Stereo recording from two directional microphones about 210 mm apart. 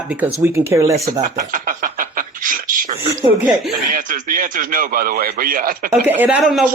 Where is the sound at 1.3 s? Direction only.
40° right (ahead or behind).